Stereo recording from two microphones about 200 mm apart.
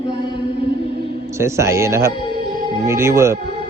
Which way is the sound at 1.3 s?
15° right (ahead or behind).